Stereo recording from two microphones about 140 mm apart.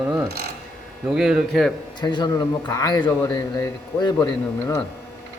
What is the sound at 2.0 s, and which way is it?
A man's voice, 30° left (ahead or behind).